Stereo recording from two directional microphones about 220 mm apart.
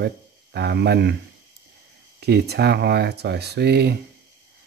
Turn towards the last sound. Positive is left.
turn(degrees=-50)  # may be behind; listen again after turning